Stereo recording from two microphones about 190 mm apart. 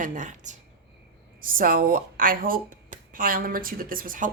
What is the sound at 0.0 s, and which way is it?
Speech, 40° right (ahead or behind).